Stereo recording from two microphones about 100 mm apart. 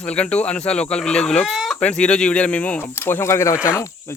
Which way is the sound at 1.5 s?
Centre (ahead or behind).